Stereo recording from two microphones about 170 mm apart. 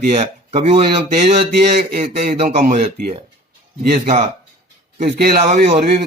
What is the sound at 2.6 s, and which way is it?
A man's voice, 50° right (ahead or behind).